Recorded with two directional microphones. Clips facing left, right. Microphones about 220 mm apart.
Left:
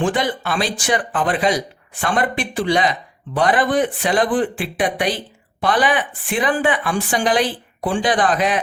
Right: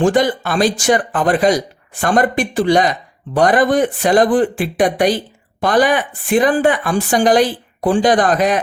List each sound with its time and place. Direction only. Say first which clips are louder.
0.0 s speech: right 6 dB; 45° right (ahead or behind)